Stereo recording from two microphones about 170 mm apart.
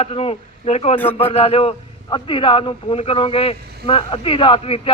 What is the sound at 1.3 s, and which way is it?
A man's voice, 35° left (ahead or behind).